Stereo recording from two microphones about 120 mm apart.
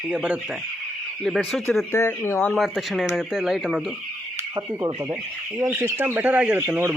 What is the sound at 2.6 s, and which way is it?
Speech, centre (ahead or behind).